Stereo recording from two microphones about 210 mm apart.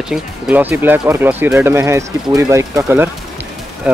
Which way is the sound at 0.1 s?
5° right (ahead or behind).